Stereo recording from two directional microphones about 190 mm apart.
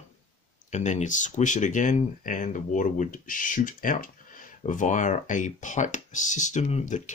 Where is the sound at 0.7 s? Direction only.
35° left (ahead or behind).